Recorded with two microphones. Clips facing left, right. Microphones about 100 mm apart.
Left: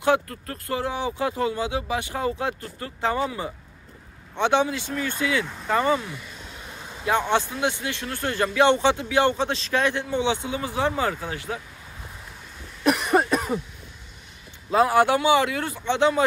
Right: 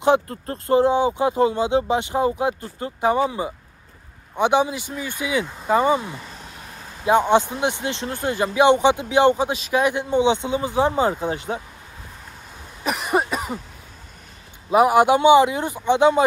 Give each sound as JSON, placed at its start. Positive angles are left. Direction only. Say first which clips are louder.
{"t": 0.0, "sound": "speech", "louder": "right 4 dB", "side_deg": -25}
{"t": 7.1, "sound": "speech", "louder": "right 6 dB", "side_deg": -15}
{"t": 13.1, "sound": "cough", "louder": "left 1 dB", "side_deg": -5}
{"t": 14.7, "sound": "speech", "louder": "right 4 dB", "side_deg": -15}